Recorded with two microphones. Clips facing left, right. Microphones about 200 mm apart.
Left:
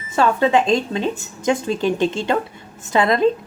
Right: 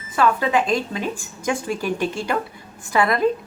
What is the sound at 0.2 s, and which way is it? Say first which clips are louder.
A woman's voice: left 3 dB; 25° left (ahead or behind).